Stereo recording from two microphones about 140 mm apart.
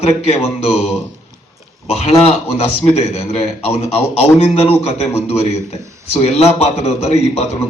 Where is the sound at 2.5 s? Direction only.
50° left (ahead or behind).